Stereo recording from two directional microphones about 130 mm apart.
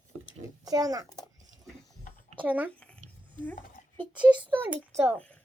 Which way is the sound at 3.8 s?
90° left.